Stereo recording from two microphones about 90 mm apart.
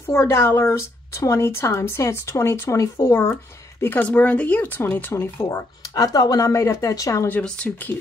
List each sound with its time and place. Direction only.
0.0 s a woman's voice: 30° left (ahead or behind)
3.8 s speech: 20° left (ahead or behind)
5.5 s a woman's voice: 40° left (ahead or behind)
7.4 s speech: 10° left (ahead or behind)